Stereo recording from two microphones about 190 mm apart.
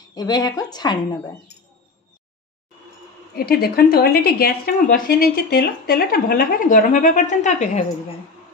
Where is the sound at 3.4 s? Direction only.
55° left (ahead or behind).